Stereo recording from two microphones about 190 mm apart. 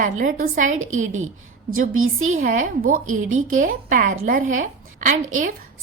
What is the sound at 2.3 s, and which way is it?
A woman's voice, 45° right (ahead or behind).